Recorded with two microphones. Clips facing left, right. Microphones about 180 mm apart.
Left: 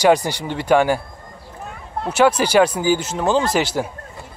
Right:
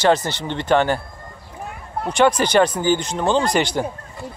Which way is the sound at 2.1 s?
5° left (ahead or behind).